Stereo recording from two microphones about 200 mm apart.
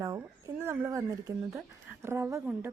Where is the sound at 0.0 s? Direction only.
15° right (ahead or behind).